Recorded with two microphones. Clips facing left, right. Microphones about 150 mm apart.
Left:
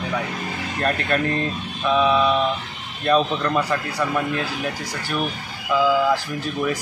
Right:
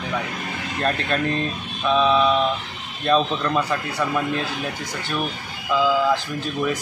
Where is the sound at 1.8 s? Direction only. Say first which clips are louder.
Even; 10° left (ahead or behind).